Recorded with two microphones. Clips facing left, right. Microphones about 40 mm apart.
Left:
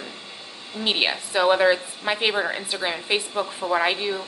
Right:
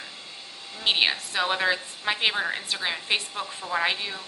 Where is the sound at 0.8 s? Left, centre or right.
Centre.